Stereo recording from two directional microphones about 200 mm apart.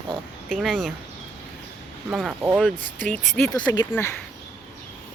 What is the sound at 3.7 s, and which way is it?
Speech, 15° left (ahead or behind).